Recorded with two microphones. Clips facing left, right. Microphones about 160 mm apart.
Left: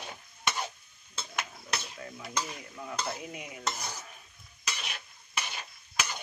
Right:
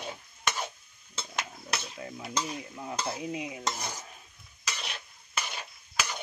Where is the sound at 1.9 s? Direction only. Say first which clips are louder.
Right 2 dB; 25° right (ahead or behind).